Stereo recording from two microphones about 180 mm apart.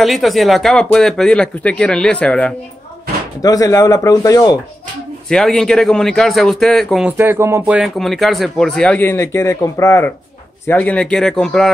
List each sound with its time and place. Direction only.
0.0 s speech: centre (ahead or behind)
3.4 s speech: 20° left (ahead or behind)
5.3 s speech: 5° left (ahead or behind)
7.1 s speech: 10° right (ahead or behind)